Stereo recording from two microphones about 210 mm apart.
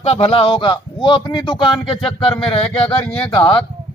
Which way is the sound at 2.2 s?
25° left (ahead or behind).